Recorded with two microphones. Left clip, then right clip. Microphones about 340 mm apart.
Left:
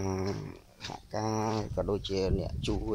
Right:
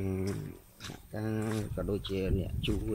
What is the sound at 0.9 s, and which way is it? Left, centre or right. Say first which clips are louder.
Speech: left 5 dB; left.